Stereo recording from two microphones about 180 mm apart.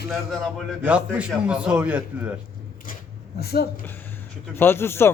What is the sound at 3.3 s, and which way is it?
Speech, 60° left (ahead or behind).